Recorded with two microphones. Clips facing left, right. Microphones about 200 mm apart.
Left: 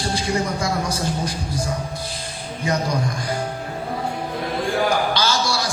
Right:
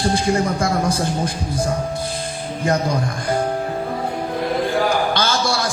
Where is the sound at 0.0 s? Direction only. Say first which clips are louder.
Right 5 dB; 50° right (ahead or behind).